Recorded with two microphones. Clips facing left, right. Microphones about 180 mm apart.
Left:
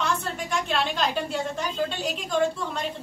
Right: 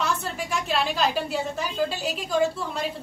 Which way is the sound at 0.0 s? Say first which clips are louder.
Even; 5° right (ahead or behind).